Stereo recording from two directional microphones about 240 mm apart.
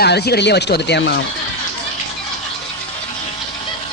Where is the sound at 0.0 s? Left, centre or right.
Left.